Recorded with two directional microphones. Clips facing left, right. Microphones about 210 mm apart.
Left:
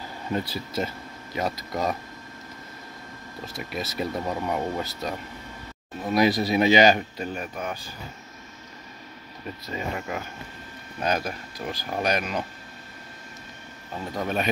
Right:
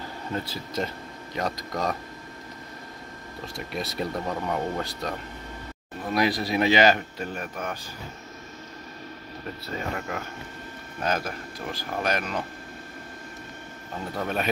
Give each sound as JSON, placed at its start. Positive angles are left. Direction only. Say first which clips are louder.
{"t": 0.3, "sound": "speech", "louder": "left 4 dB", "side_deg": 10}
{"t": 3.5, "sound": "speech", "louder": "even", "side_deg": 0}
{"t": 6.1, "sound": "speech", "louder": "left 3 dB", "side_deg": 20}
{"t": 9.7, "sound": "speech", "louder": "left 1 dB", "side_deg": 10}
{"t": 14.2, "sound": "speech", "louder": "left 2 dB", "side_deg": 0}